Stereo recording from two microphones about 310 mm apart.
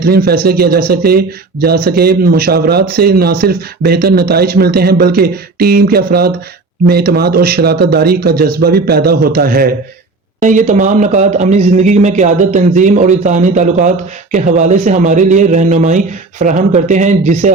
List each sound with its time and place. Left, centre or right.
0.0 s a man's voice: right